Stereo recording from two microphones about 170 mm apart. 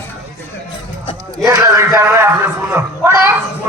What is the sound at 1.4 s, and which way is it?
A man's voice, 20° right (ahead or behind).